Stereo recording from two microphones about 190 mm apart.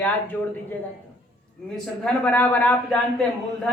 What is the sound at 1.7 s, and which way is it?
Speech, 5° left (ahead or behind).